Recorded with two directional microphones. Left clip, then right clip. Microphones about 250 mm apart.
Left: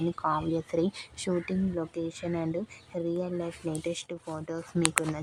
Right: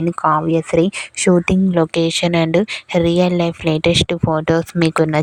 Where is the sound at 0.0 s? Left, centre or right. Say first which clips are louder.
Right 13 dB; right.